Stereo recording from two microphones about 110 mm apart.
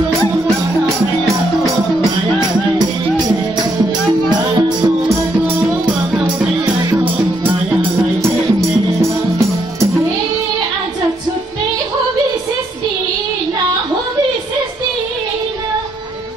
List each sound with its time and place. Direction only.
4.6 s music: 40° right (ahead or behind)
6.6 s music: 35° right (ahead or behind)
8.2 s music: 25° right (ahead or behind)